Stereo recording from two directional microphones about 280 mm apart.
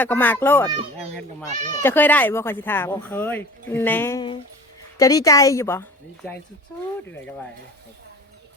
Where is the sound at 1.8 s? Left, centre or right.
Centre.